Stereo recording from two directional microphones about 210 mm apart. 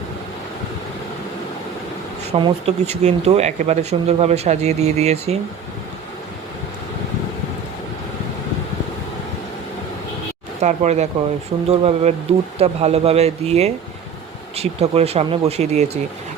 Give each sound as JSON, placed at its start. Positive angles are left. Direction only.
{"t": 2.3, "sound": "speech", "side_deg": -30}
{"t": 10.6, "sound": "speech", "side_deg": -30}